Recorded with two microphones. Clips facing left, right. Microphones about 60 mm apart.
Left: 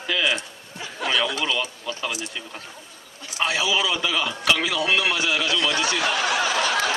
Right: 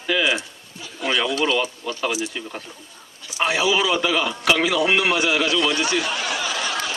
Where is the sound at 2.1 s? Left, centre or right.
Centre.